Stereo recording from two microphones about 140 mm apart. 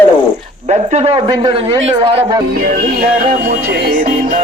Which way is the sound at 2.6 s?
90° right.